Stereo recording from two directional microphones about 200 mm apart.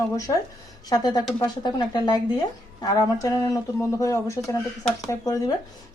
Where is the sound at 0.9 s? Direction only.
20° left (ahead or behind).